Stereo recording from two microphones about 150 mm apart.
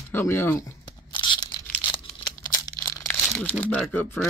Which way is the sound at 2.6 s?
25° left (ahead or behind).